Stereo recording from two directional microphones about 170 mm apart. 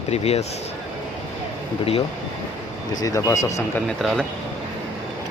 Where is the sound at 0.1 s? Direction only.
40° left (ahead or behind).